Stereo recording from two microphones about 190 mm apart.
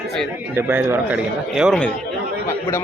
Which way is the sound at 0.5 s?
10° right (ahead or behind).